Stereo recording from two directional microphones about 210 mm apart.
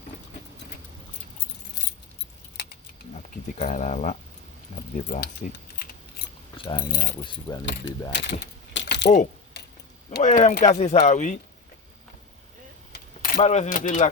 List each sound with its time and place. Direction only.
3.6 s speech: 35° left (ahead or behind)
6.6 s speech: 20° left (ahead or behind)
6.8 s speech: 45° left (ahead or behind)
7.2 s speech: 20° left (ahead or behind)
7.6 s speech: 60° left (ahead or behind)
8.1 s a sound: 55° left (ahead or behind)
10.2 s speech: 35° left (ahead or behind)
12.9 s keys jangling: 40° left (ahead or behind)